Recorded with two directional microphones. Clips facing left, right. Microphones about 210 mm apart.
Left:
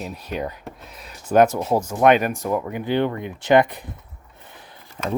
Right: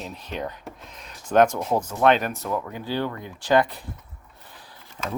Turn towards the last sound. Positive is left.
turn(degrees=30)  # may be behind; listen again after turning